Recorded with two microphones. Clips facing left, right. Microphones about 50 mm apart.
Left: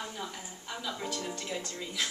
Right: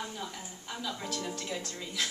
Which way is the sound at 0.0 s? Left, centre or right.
Centre.